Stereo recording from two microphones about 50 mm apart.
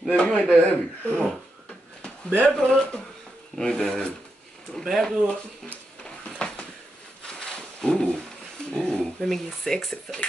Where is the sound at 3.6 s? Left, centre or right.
Centre.